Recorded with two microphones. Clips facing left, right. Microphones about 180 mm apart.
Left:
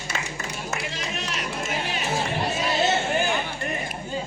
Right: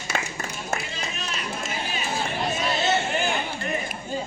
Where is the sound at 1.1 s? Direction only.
75° left (ahead or behind).